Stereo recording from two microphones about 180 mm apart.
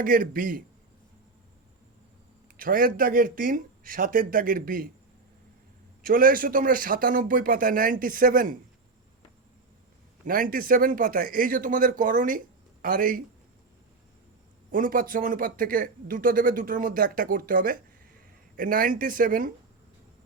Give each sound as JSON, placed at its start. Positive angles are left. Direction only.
{"t": 0.0, "sound": "speech", "side_deg": -50}
{"t": 2.6, "sound": "speech", "side_deg": -50}
{"t": 6.0, "sound": "speech", "side_deg": -50}
{"t": 10.2, "sound": "speech", "side_deg": -50}
{"t": 14.7, "sound": "speech", "side_deg": -50}